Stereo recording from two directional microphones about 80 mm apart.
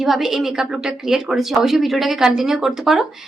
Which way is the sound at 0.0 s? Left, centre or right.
Centre.